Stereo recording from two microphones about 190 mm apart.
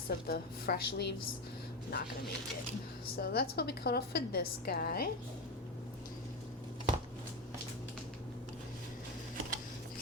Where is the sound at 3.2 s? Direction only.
55° left (ahead or behind).